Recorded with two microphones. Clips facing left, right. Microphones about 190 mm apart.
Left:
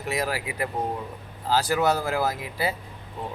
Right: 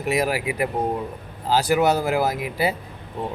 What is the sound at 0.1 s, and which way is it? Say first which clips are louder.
Speech: right 6 dB; 15° right (ahead or behind).